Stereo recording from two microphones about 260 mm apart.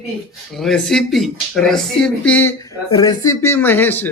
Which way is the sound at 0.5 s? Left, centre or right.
Centre.